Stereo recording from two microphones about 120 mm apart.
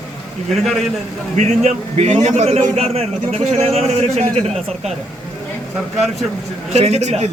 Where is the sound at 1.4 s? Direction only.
70° right (ahead or behind).